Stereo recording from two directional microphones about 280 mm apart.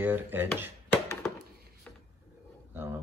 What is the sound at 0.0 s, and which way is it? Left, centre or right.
Speech, centre.